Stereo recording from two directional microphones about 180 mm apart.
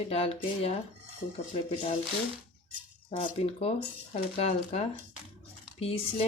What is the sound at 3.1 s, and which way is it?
Speech, 35° left (ahead or behind).